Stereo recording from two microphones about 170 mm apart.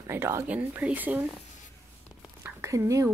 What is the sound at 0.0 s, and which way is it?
Speech, 15° right (ahead or behind).